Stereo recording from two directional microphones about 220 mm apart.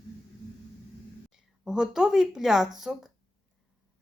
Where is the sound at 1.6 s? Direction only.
5° right (ahead or behind).